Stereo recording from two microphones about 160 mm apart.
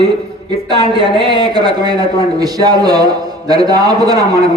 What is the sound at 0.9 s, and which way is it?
Speech, 30° right (ahead or behind).